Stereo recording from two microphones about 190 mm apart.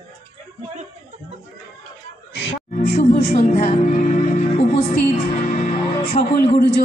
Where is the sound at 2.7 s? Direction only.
40° left (ahead or behind).